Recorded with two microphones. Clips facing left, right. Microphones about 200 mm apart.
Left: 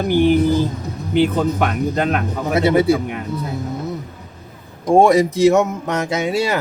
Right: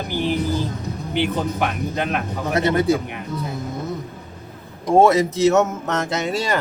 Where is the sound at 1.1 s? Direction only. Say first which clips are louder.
Left 6 dB; 45° left (ahead or behind).